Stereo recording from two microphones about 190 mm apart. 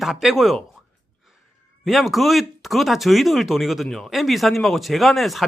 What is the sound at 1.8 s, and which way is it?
Speech, centre (ahead or behind).